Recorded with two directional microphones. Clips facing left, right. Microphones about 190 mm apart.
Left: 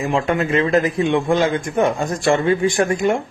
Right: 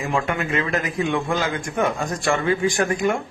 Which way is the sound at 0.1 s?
25° left (ahead or behind).